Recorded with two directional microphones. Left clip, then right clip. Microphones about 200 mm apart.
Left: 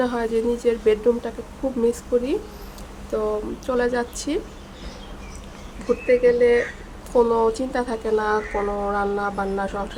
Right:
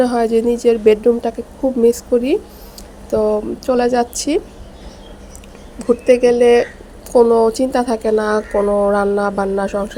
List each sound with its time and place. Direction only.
0.0 s speech: 25° right (ahead or behind)
6.1 s speech: 30° right (ahead or behind)